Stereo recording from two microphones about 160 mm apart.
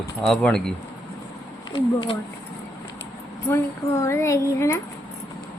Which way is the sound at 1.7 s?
30° left (ahead or behind).